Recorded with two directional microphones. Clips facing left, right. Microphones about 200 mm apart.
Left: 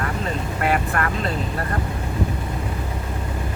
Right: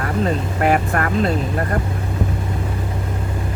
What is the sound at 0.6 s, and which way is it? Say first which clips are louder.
Speech: right 4 dB; 45° right (ahead or behind).